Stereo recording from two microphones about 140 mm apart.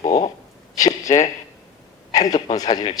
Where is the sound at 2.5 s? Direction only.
25° left (ahead or behind).